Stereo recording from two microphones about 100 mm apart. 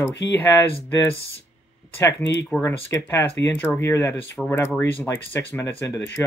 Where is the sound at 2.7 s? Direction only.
25° left (ahead or behind).